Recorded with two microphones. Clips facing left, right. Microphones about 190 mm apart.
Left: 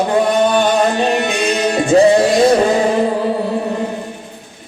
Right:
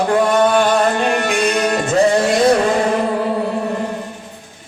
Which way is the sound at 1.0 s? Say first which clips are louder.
Left 1 dB; 20° left (ahead or behind).